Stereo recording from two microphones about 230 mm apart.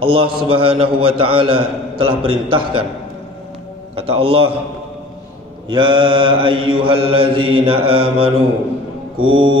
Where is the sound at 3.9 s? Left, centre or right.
Right.